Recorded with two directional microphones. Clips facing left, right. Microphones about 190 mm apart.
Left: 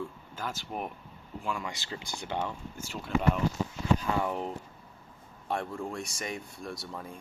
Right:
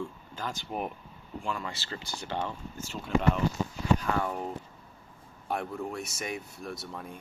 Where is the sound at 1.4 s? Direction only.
10° left (ahead or behind).